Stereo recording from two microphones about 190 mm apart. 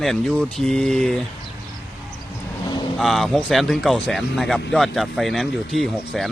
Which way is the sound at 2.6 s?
20° left (ahead or behind).